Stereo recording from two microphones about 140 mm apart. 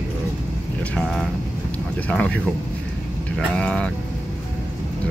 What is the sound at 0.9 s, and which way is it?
Speech, 5° left (ahead or behind).